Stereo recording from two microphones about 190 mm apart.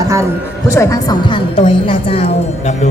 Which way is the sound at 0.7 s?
15° left (ahead or behind).